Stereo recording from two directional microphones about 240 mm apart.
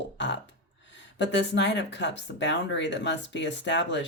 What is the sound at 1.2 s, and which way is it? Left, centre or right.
Speech, left.